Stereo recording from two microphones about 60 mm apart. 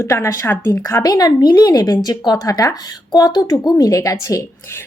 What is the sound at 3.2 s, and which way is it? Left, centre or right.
A woman's voice, left.